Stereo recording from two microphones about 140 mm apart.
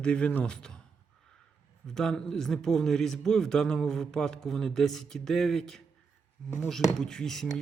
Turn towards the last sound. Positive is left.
turn(degrees=5)  # may be behind; listen again after turning